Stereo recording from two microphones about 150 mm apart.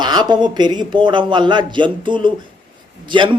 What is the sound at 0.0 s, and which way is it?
A woman's voice, 30° right (ahead or behind).